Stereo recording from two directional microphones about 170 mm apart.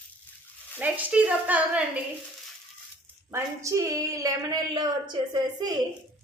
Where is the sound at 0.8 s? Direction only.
10° right (ahead or behind).